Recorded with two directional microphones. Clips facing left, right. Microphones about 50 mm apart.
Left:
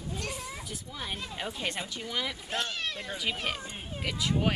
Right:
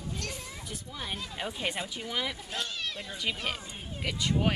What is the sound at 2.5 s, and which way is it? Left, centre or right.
Speech, left.